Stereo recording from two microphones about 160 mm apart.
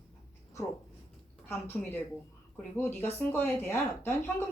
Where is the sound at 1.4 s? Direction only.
10° left (ahead or behind).